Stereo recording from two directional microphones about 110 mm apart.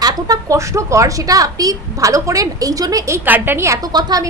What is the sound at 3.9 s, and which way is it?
Speech, 35° right (ahead or behind).